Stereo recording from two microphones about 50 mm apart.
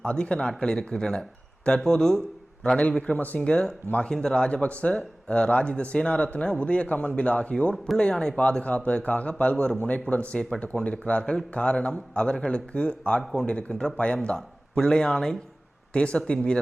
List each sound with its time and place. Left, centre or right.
0.0 s speech: centre
3.1 s speech: left
3.4 s a man's voice: centre
15.9 s speech: left